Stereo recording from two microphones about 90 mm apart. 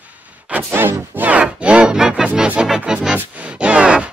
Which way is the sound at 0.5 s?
20° right (ahead or behind).